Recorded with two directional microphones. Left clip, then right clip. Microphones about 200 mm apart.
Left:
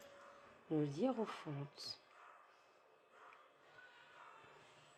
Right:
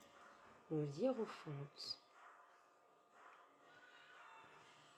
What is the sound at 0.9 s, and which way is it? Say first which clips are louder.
Speech: left 1 dB; 40° left (ahead or behind).